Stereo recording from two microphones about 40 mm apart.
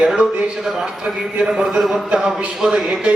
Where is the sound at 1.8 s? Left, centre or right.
Centre.